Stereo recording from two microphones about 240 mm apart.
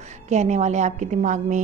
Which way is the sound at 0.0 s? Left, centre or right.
Right.